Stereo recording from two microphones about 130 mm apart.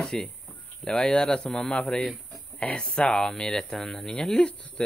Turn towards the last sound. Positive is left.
turn(degrees=5)  # may be behind; listen again after turning